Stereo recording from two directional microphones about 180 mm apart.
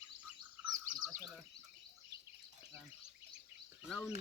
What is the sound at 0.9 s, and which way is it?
Frog, centre (ahead or behind).